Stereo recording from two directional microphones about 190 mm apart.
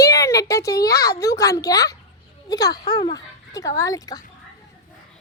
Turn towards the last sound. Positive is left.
turn(degrees=20)  # may be behind; listen again after turning